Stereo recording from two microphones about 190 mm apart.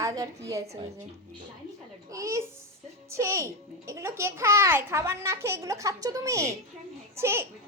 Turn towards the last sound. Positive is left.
turn(degrees=-15)  # may be behind; listen again after turning